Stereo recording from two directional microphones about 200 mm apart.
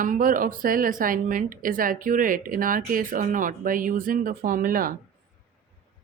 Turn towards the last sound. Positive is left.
turn(degrees=-45)  # may be behind; listen again after turning